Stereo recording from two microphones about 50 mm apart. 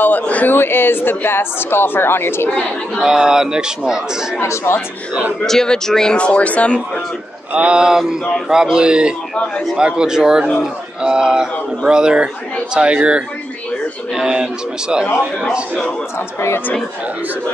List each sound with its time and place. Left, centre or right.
0.0 s a man's voice: left
0.6 s speech: left
3.0 s speech: centre
4.4 s speech: left
5.5 s speech: centre
6.1 s speech: left
7.5 s speech: right
16.3 s speech: left